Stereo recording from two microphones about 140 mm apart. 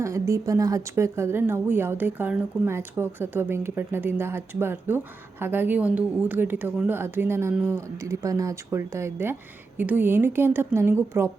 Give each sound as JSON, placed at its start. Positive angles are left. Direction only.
{"t": 0.0, "sound": "speech", "side_deg": -20}